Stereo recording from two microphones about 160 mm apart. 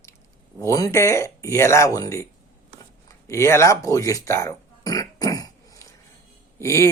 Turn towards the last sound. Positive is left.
turn(degrees=20)  # may be behind; listen again after turning